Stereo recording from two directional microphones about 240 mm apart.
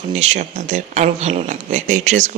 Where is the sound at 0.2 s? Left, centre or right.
Right.